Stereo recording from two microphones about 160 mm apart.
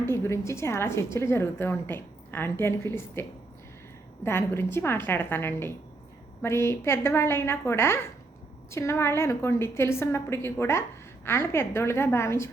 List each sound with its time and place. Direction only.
0.0 s a woman's voice: 15° left (ahead or behind)